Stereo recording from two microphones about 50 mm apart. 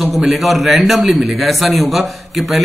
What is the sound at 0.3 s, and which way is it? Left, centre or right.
A man's voice, centre.